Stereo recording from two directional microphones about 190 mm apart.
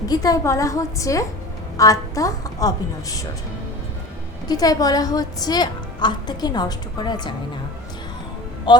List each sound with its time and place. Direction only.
0.0 s a woman's voice: 20° left (ahead or behind)
4.4 s a woman's voice: 20° left (ahead or behind)
8.7 s a woman's voice: 25° left (ahead or behind)